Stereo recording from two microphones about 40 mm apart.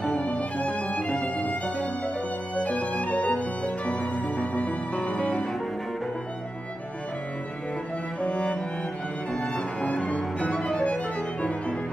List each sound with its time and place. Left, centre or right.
0.0 s music: left
8.2 s music: left